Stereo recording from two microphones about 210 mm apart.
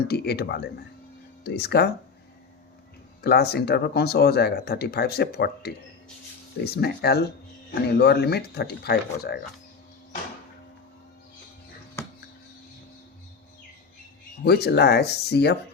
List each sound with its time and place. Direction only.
0.1 s speech: 50° left (ahead or behind)
3.2 s speech: 50° left (ahead or behind)
12.0 s a sound: 10° left (ahead or behind)
14.4 s speech: 50° left (ahead or behind)